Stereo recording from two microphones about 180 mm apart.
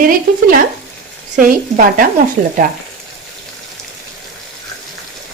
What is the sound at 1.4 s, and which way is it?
Speech, 50° right (ahead or behind).